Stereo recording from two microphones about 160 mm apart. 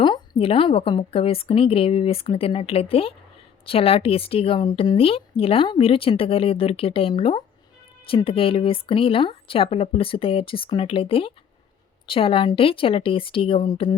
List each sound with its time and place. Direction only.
0.0 s speech: 30° left (ahead or behind)